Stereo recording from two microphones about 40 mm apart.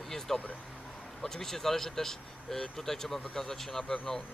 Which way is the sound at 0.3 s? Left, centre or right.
Left.